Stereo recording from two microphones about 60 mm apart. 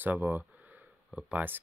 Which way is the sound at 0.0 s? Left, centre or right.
Right.